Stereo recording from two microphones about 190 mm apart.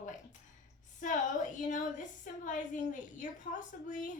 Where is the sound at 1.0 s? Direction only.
40° left (ahead or behind).